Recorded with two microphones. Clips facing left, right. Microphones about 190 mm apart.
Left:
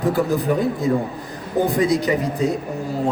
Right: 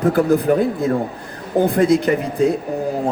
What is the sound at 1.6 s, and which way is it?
Speech, 55° right (ahead or behind).